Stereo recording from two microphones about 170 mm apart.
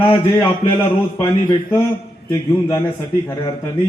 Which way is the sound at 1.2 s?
15° left (ahead or behind).